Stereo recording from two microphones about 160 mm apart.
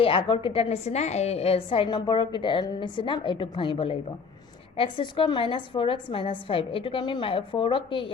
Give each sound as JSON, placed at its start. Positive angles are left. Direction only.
{"t": 0.0, "sound": "a woman's voice", "side_deg": 35}